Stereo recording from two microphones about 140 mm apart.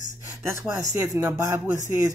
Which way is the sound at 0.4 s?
20° right (ahead or behind).